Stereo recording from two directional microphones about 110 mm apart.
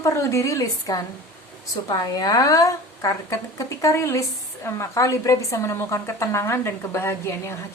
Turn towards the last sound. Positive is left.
turn(degrees=25)  # may be behind; listen again after turning